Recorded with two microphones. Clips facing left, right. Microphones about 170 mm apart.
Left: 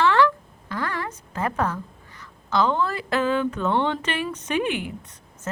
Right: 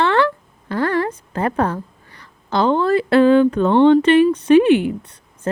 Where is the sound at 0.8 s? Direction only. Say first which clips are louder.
Right 11 dB; 55° right (ahead or behind).